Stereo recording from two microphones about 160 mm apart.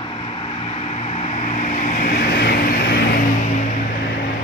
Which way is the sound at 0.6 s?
35° left (ahead or behind).